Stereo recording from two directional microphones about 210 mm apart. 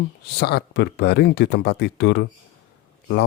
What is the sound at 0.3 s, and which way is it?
Speech, 50° left (ahead or behind).